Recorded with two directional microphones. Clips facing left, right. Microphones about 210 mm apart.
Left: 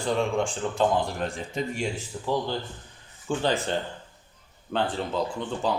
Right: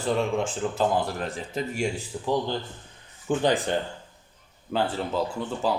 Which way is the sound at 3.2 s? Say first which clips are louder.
Right 3 dB; 15° right (ahead or behind).